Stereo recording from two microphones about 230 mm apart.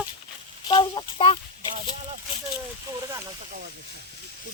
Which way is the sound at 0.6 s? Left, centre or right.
Centre.